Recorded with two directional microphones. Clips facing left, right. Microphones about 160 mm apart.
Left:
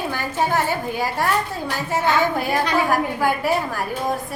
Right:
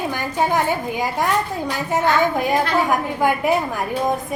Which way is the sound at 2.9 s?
20° right (ahead or behind).